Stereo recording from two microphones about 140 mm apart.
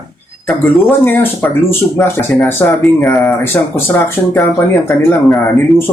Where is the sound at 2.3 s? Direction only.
5° left (ahead or behind).